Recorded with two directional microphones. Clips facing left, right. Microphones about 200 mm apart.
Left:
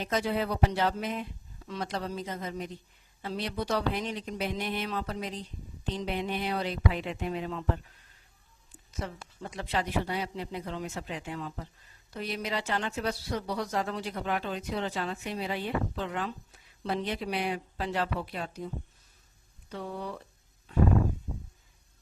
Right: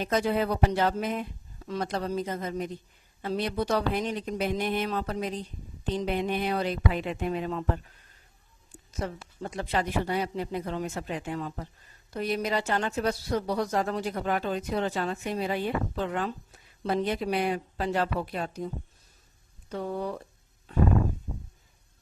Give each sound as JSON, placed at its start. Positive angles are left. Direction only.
{"t": 0.0, "sound": "a woman's voice", "side_deg": -50}
{"t": 9.0, "sound": "a woman's voice", "side_deg": -45}
{"t": 19.7, "sound": "a woman's voice", "side_deg": -45}